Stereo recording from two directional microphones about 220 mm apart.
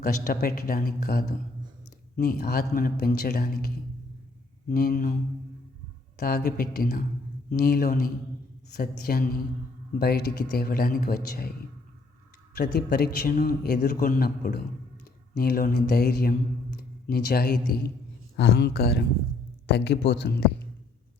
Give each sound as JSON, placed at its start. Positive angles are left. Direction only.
{"t": 0.0, "sound": "a man's voice", "side_deg": 40}
{"t": 4.7, "sound": "a woman's voice", "side_deg": 40}
{"t": 6.1, "sound": "a man's voice", "side_deg": 45}
{"t": 12.5, "sound": "a man's voice", "side_deg": 45}